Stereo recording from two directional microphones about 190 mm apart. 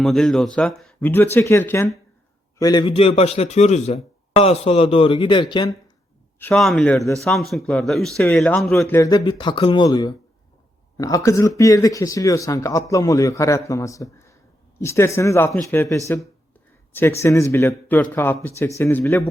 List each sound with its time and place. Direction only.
0.0 s speech: centre (ahead or behind); by 5.7 s 25° left (ahead or behind)
6.4 s a man's voice: centre (ahead or behind)
8.9 s speech: 15° left (ahead or behind)